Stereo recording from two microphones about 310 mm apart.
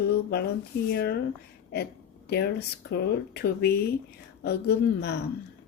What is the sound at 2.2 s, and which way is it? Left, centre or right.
Speech, left.